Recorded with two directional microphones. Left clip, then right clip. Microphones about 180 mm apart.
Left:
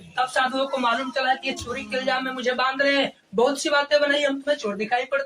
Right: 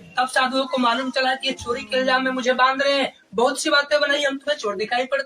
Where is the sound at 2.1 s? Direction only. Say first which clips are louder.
Right 3 dB; 25° left (ahead or behind).